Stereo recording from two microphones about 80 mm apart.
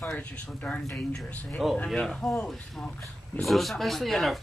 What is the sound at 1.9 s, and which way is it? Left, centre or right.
Speech, centre.